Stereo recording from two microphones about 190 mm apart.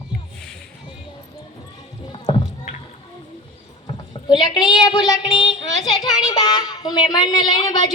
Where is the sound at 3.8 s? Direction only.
20° left (ahead or behind).